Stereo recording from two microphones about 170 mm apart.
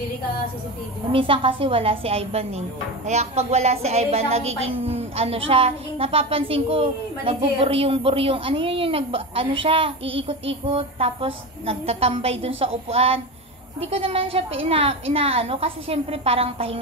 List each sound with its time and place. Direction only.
1.1 s a woman's voice: 30° right (ahead or behind)